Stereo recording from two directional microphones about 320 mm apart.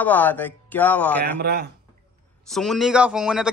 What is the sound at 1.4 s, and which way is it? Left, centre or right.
Speech, right.